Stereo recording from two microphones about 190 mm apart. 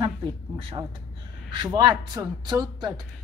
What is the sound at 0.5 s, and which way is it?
A woman's voice, 25° right (ahead or behind).